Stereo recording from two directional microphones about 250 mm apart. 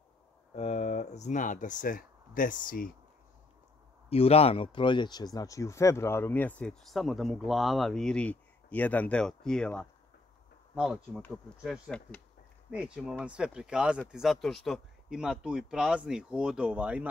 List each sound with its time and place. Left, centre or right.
0.6 s speech: left
4.1 s speech: left; by 17.1 s centre